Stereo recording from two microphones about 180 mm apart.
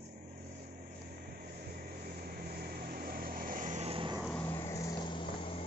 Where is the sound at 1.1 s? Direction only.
55° right (ahead or behind); by 4.1 s 30° right (ahead or behind).